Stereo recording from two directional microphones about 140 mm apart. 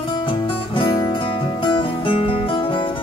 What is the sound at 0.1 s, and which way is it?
Music, 40° left (ahead or behind).